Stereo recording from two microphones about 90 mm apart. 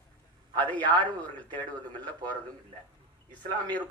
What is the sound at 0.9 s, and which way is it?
Speech, 15° left (ahead or behind).